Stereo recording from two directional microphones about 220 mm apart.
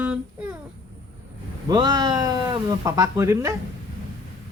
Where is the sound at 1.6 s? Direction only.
20° right (ahead or behind).